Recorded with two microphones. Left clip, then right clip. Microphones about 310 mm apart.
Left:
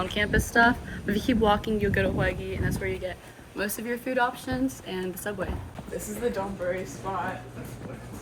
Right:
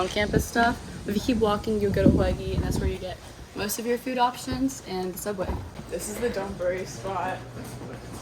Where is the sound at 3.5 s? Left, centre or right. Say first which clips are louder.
Right 3 dB; centre.